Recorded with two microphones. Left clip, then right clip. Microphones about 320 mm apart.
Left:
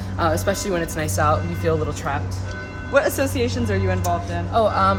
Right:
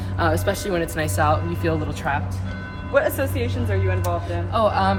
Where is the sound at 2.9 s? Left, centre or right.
Left.